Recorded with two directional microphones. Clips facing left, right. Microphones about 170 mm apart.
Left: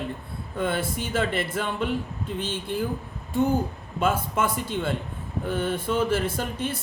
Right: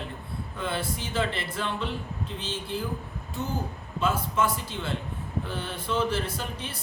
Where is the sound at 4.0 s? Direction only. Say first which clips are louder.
Left 2 dB; 50° left (ahead or behind).